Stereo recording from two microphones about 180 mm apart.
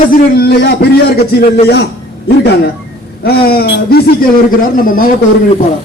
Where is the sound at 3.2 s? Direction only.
60° left (ahead or behind).